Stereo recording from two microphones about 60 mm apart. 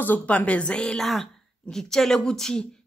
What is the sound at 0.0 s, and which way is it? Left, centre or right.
Speech, left.